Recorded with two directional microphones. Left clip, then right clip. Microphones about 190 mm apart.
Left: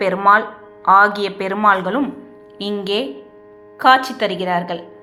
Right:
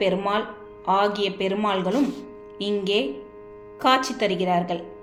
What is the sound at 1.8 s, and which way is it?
A woman's voice, 5° left (ahead or behind).